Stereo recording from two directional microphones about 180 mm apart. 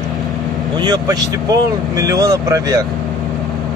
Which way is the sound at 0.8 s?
20° right (ahead or behind).